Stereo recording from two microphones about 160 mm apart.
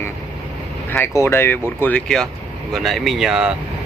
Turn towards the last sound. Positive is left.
turn(degrees=-5)  # may be behind; listen again after turning